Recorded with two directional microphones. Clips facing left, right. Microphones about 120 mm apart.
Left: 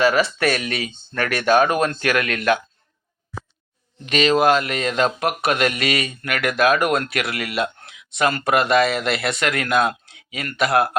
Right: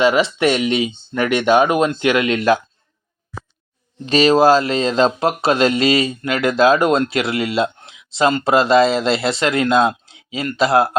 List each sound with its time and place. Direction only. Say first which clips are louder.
0.0 s speech: right 3 dB; 20° right (ahead or behind)
4.0 s speech: right 4 dB; 30° right (ahead or behind)